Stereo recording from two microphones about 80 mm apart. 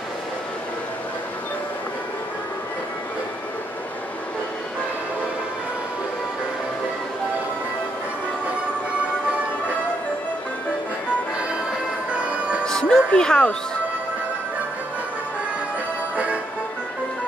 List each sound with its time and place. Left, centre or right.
12.2 s music: centre
12.6 s music: centre